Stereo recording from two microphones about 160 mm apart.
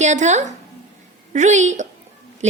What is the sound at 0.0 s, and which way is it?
A woman's voice, 45° right (ahead or behind).